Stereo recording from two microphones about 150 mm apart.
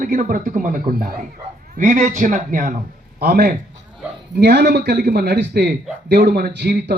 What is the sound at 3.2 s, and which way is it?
A man's voice, 90° right.